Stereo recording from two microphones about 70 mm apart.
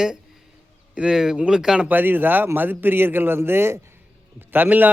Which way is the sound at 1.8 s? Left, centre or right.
Right.